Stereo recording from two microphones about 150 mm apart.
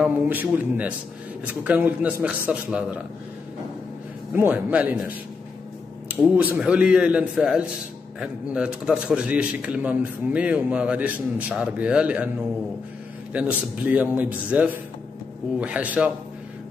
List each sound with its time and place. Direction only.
0.0 s a man's voice: 10° right (ahead or behind)
4.3 s a man's voice: 10° right (ahead or behind)
13.3 s a man's voice: 10° right (ahead or behind)